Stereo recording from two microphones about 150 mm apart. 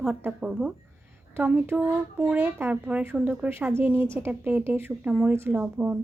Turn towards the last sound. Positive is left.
turn(degrees=-10)  # may be behind; listen again after turning